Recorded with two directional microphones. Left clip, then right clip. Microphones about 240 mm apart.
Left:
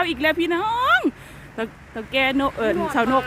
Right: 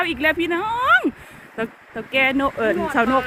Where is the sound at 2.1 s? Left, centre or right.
Centre.